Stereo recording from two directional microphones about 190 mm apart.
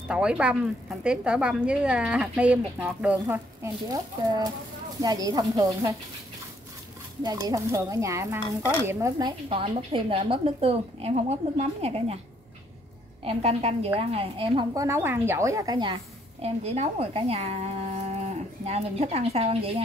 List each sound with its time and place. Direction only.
0.1 s a woman's voice: 5° right (ahead or behind)
7.2 s speech: 20° right (ahead or behind)
9.5 s a woman's voice: 30° right (ahead or behind)
13.2 s a woman's voice: 30° right (ahead or behind)
18.7 s a woman's voice: 35° right (ahead or behind)